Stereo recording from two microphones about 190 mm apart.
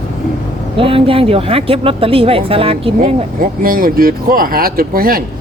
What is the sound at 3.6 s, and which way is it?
Speech, 50° right (ahead or behind).